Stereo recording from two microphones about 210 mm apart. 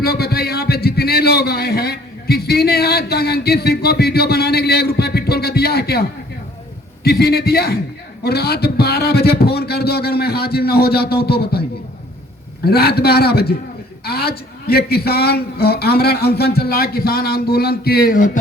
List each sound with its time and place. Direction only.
0.0 s a sound: 50° left (ahead or behind)
7.0 s a man's voice: 50° left (ahead or behind)
12.6 s a man's voice: 50° left (ahead or behind)